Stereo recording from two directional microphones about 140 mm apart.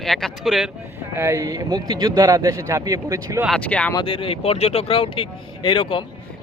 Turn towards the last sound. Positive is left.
turn(degrees=35)  # may be behind; listen again after turning